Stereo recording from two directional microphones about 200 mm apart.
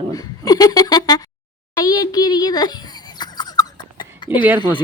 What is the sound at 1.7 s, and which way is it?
Cough, 20° left (ahead or behind).